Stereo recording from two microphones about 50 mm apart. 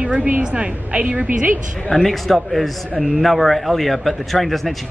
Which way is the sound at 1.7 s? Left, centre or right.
Centre.